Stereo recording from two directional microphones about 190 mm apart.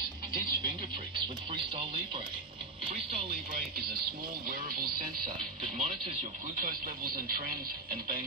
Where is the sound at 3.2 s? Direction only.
50° right (ahead or behind).